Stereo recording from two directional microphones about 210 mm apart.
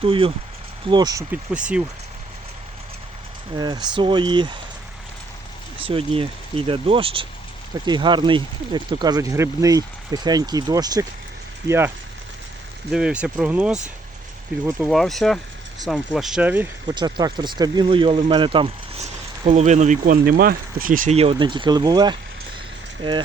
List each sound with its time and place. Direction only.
0.0 s speech: 25° right (ahead or behind)
1.3 s speech: 5° right (ahead or behind)
3.6 s speech: 20° right (ahead or behind)
5.8 s speech: 25° right (ahead or behind)
12.9 s speech: 5° right (ahead or behind)
14.8 s speech: centre (ahead or behind)
16.8 s speech: 20° right (ahead or behind)